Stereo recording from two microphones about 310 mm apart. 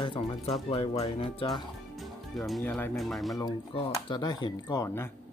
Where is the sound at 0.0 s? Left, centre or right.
Centre.